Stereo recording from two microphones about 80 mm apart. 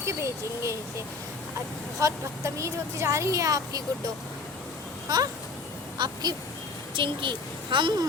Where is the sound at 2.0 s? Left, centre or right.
Right.